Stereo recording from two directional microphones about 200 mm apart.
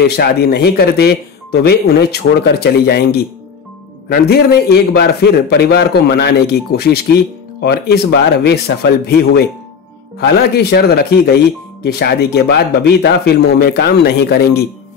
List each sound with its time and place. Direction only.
0.0 s a man's voice: 50° left (ahead or behind)